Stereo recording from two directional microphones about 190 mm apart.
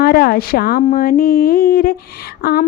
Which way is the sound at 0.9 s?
50° left (ahead or behind).